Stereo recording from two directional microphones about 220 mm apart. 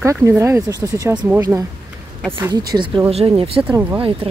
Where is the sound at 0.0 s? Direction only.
10° right (ahead or behind).